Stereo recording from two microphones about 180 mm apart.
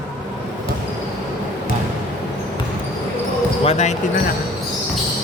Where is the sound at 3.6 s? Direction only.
35° left (ahead or behind).